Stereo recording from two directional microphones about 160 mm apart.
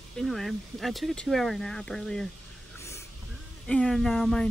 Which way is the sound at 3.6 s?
5° left (ahead or behind).